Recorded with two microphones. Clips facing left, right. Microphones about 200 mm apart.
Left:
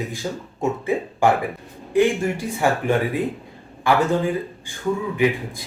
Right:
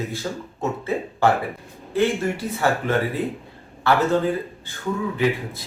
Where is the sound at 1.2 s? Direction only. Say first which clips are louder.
Left 1 dB; 15° left (ahead or behind).